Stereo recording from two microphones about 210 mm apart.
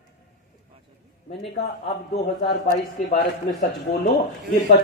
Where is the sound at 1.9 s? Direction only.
25° left (ahead or behind).